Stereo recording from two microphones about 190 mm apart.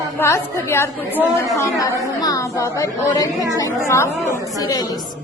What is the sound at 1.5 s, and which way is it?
A woman's voice, 15° left (ahead or behind).